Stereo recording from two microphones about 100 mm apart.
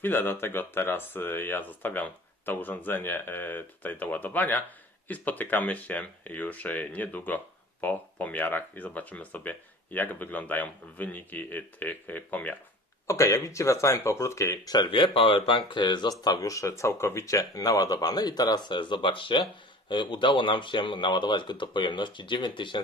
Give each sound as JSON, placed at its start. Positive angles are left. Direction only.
{"t": 0.0, "sound": "speech", "side_deg": 20}
{"t": 13.0, "sound": "speech", "side_deg": 30}